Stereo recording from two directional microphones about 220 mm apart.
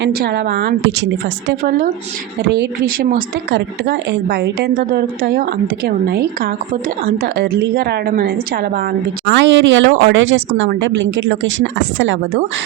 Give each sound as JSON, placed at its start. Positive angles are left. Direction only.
{"t": 0.0, "sound": "a woman's voice", "side_deg": -45}